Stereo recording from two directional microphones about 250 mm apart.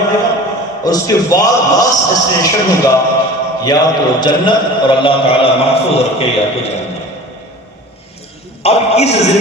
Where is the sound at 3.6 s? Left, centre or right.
Centre.